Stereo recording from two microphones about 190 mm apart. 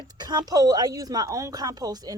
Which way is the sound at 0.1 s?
20° right (ahead or behind).